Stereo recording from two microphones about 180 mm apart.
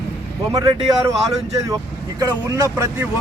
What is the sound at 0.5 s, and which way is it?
Speech, 20° right (ahead or behind).